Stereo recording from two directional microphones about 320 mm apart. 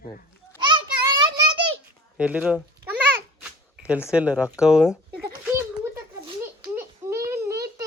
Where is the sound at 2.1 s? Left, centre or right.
Centre.